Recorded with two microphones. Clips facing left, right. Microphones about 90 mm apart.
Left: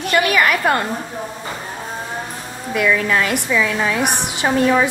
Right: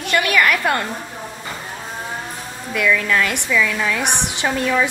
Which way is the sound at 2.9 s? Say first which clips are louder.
Even; 20° left (ahead or behind).